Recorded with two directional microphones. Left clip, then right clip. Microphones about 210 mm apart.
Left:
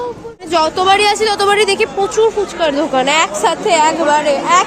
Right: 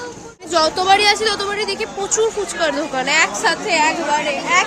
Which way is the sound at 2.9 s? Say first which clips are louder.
Left 4 dB; 20° left (ahead or behind).